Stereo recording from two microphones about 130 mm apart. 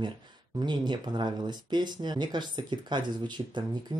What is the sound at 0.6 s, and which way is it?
Speech, 35° right (ahead or behind).